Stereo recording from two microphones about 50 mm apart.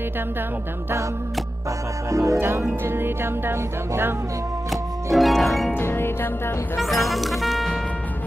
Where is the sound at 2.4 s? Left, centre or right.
Right.